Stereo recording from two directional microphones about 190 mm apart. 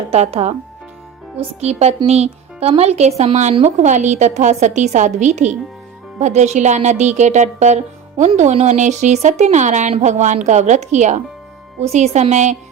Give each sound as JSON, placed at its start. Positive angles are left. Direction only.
{"t": 0.1, "sound": "speech", "side_deg": -30}